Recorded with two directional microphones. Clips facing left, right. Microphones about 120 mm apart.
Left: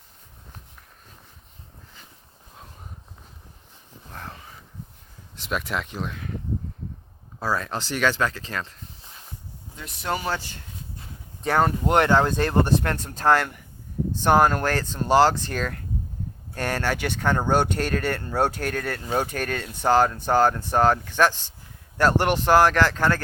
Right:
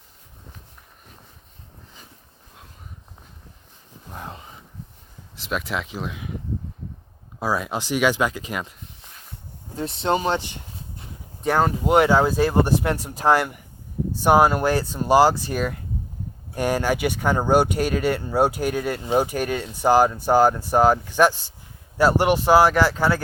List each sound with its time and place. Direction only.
4.1 s a sound: 20° right (ahead or behind)
5.4 s speech: centre (ahead or behind)
7.3 s speech: 10° right (ahead or behind)
9.7 s speech: 30° right (ahead or behind)
11.4 s speech: centre (ahead or behind)